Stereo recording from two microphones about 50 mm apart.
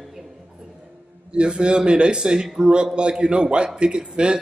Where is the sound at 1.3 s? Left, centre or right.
Centre.